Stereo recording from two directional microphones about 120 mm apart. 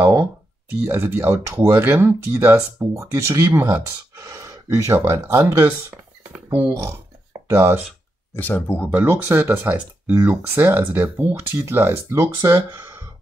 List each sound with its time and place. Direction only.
0.0 s speech: 25° right (ahead or behind)
6.3 s a sound: 15° right (ahead or behind)
7.4 s speech: 25° right (ahead or behind)
8.4 s speech: 15° left (ahead or behind)
8.9 s speech: 15° right (ahead or behind)